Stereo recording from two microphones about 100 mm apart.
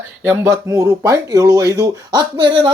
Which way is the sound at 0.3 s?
30° right (ahead or behind).